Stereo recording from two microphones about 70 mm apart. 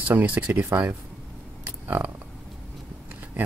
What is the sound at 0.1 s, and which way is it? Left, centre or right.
Speech, right.